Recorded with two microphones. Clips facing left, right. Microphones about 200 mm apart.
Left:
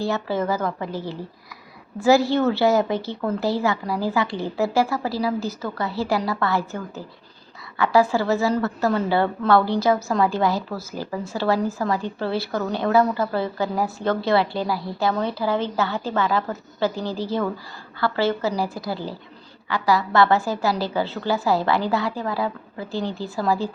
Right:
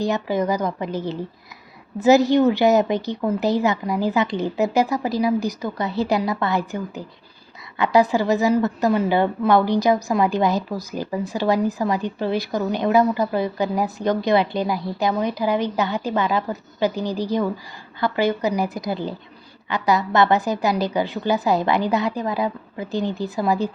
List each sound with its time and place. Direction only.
0.0 s a woman's voice: 15° right (ahead or behind)